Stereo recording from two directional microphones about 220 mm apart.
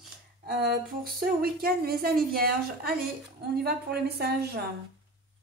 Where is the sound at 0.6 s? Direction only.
40° right (ahead or behind).